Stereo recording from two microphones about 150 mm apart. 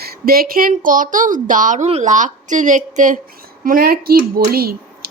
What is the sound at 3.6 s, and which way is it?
Speech, 70° right (ahead or behind).